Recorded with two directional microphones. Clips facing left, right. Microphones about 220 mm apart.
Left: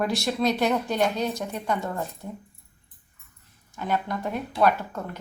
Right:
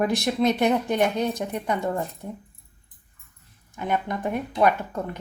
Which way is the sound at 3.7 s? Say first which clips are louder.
Right 1 dB; 15° right (ahead or behind).